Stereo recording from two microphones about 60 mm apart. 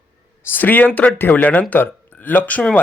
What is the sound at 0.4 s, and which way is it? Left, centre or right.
Speech, left.